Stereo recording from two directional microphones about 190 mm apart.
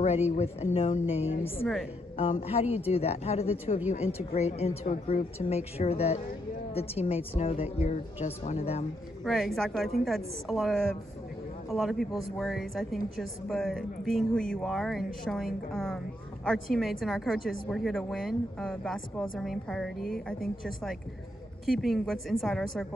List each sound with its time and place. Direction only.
0.0 s a woman's voice: 35° left (ahead or behind)
9.2 s a woman's voice: centre (ahead or behind)
21.6 s a woman's voice: centre (ahead or behind)